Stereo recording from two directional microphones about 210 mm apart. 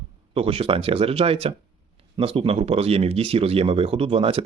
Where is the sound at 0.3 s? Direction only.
25° right (ahead or behind).